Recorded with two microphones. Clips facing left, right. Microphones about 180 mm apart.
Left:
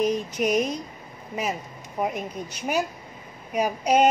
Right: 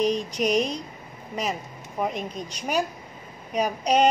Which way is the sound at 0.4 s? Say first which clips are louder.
Left 1 dB; 10° left (ahead or behind).